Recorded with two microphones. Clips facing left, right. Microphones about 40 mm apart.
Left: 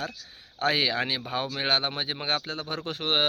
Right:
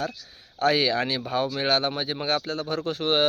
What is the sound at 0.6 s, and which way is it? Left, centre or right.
Speech, left.